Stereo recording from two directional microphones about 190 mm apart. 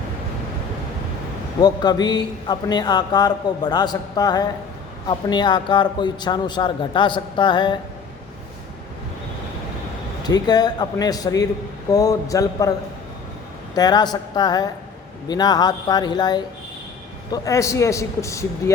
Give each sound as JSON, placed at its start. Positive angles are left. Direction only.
{"t": 1.6, "sound": "a man's voice", "side_deg": 20}
{"t": 10.2, "sound": "a man's voice", "side_deg": 20}
{"t": 13.7, "sound": "a man's voice", "side_deg": 20}